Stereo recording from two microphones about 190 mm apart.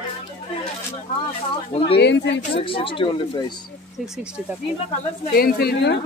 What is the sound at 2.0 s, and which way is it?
Speech, 65° left (ahead or behind).